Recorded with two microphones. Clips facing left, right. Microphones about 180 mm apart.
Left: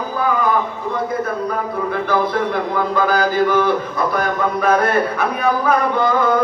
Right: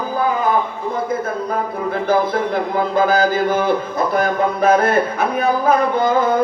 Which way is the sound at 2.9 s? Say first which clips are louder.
Right 2 dB; 45° right (ahead or behind).